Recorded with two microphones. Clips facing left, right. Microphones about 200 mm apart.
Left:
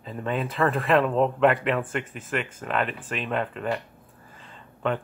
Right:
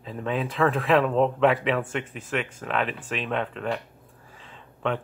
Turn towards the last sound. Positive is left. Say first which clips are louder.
# left 1 dB
turn(degrees=0)  # may be behind; listen again after turning